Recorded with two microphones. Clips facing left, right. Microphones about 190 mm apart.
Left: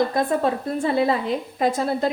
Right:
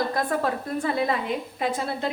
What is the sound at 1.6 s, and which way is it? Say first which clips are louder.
Speech: left 7 dB; 40° left (ahead or behind).